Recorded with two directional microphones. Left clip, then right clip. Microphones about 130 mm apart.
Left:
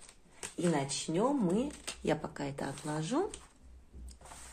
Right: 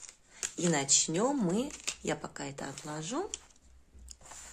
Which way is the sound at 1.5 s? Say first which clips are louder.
Even; 50° right (ahead or behind).